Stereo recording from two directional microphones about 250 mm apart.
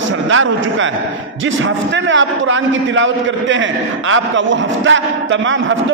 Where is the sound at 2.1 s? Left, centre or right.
Right.